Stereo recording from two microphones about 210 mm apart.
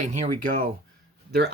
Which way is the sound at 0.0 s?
35° right (ahead or behind).